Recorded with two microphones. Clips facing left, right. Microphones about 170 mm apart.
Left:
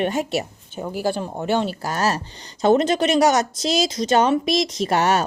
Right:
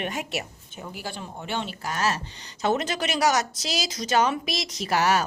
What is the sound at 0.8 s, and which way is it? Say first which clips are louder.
A woman's voice: left 12 dB; 40° left (ahead or behind).